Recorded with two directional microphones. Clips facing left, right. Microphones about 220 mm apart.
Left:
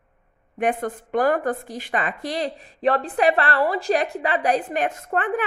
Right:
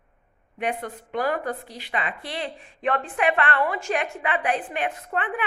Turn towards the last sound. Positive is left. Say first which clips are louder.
# left 5 dB
turn(degrees=45)  # may be behind; listen again after turning